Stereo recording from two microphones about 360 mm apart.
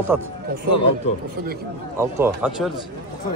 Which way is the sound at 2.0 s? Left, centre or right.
Centre.